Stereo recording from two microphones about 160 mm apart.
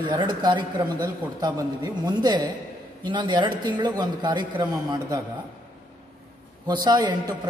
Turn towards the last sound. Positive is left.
turn(degrees=-25)  # may be behind; listen again after turning